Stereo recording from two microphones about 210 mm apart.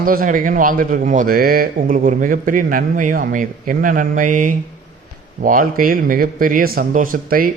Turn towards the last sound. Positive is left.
turn(degrees=-40)  # may be behind; listen again after turning